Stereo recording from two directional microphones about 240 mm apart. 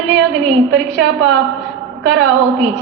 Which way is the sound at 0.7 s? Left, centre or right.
Right.